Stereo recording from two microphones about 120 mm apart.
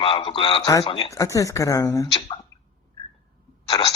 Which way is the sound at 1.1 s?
25° left (ahead or behind).